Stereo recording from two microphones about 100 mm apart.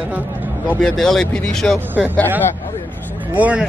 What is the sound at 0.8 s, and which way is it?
Speech, 5° left (ahead or behind).